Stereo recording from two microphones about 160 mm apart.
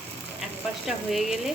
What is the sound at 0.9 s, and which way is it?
Speech, centre (ahead or behind).